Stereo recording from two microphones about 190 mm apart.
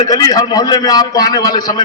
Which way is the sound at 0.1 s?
20° left (ahead or behind).